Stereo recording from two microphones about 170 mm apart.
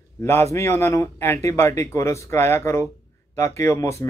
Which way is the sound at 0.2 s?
15° left (ahead or behind).